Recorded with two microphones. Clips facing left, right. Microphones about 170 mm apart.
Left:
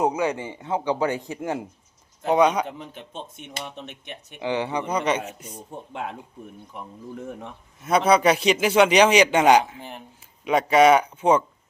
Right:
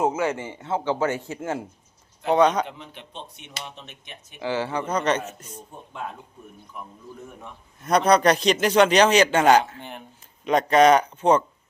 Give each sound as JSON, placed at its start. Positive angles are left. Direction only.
{"t": 0.0, "sound": "a man's voice", "side_deg": 15}
{"t": 2.6, "sound": "a man's voice", "side_deg": 45}
{"t": 4.4, "sound": "a man's voice", "side_deg": 20}
{"t": 5.9, "sound": "speech", "side_deg": 80}
{"t": 7.8, "sound": "a man's voice", "side_deg": 5}